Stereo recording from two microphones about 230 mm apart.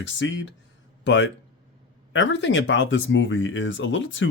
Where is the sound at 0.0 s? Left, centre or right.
Left.